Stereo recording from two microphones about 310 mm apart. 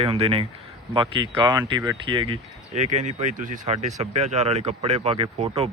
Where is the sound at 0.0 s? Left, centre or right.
Centre.